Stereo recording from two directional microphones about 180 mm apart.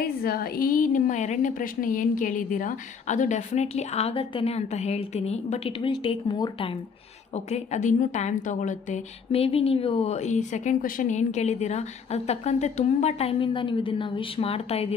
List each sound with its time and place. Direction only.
0.0 s a woman's voice: 55° left (ahead or behind); by 6.8 s 30° left (ahead or behind)
7.3 s a woman's voice: 40° left (ahead or behind)